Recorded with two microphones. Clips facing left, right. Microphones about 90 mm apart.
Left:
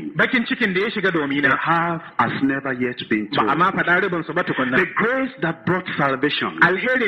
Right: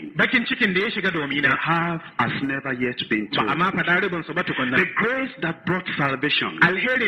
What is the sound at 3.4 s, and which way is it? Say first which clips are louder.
A man's voice: left 5 dB; 20° left (ahead or behind).